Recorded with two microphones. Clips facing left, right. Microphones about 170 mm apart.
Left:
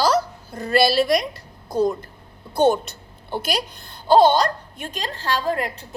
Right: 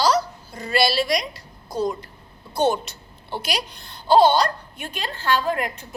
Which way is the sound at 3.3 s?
50° left (ahead or behind).